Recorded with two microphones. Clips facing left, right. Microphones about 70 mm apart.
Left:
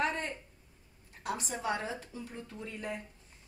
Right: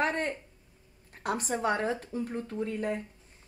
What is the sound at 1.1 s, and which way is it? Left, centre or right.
A woman's voice, right.